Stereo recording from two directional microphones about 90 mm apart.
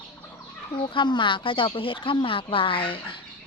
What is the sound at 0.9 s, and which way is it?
Speech, 65° left (ahead or behind).